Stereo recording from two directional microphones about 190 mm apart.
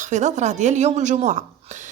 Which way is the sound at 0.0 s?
40° right (ahead or behind).